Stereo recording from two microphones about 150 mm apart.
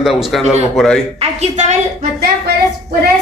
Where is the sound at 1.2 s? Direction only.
50° right (ahead or behind).